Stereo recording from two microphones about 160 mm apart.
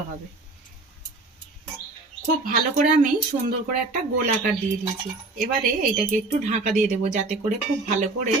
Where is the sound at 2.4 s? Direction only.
60° right (ahead or behind).